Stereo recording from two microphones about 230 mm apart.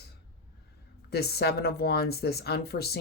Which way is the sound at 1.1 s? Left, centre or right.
Left.